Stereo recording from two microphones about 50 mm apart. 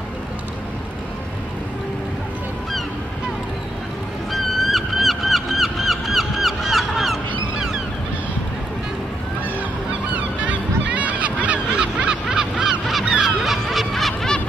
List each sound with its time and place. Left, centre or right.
4.3 s music: centre
10.1 s honk: right
13.1 s honk: centre